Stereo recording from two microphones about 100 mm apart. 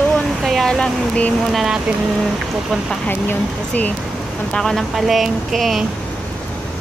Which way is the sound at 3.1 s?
15° left (ahead or behind).